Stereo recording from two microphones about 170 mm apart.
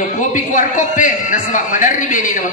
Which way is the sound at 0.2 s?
50° left (ahead or behind).